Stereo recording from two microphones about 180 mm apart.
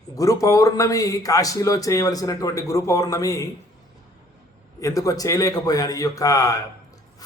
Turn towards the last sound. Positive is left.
turn(degrees=20)  # may be behind; listen again after turning